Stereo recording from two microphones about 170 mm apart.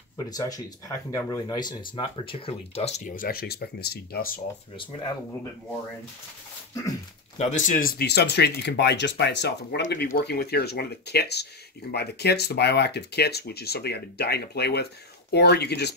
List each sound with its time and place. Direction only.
0.3 s speech: 20° left (ahead or behind); by 4.3 s 65° left (ahead or behind)
7.3 s speech: 45° left (ahead or behind)
8.0 s speech: 75° left (ahead or behind)